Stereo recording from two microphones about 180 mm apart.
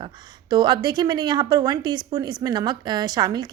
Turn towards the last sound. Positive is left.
turn(degrees=-25)  # may be behind; listen again after turning